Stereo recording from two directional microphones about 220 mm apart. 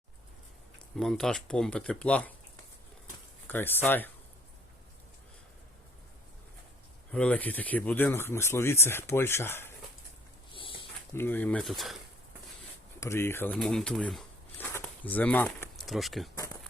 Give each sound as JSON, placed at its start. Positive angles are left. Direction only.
{"t": 0.9, "sound": "speech", "side_deg": 0}
{"t": 3.4, "sound": "speech", "side_deg": 10}
{"t": 7.1, "sound": "speech", "side_deg": 5}
{"t": 10.5, "sound": "dog", "side_deg": 25}
{"t": 11.1, "sound": "speech", "side_deg": 10}
{"t": 13.0, "sound": "speech", "side_deg": 10}